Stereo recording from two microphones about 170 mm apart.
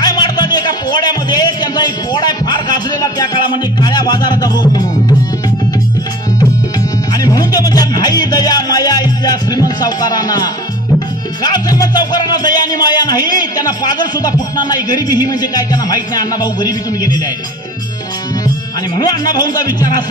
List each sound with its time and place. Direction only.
0.0 s music: 25° left (ahead or behind)
7.3 s music: 20° left (ahead or behind)
11.4 s speech: 20° left (ahead or behind)
18.9 s speech: 25° left (ahead or behind)